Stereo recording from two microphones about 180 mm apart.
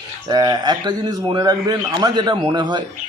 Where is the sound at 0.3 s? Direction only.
20° right (ahead or behind).